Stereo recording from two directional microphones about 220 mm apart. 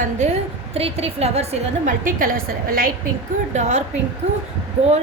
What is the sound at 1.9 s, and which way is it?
A woman's voice, 40° right (ahead or behind).